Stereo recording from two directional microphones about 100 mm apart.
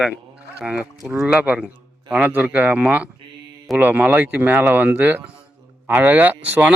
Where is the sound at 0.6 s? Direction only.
10° right (ahead or behind).